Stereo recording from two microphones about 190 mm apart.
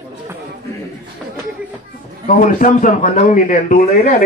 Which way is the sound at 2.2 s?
45° left (ahead or behind).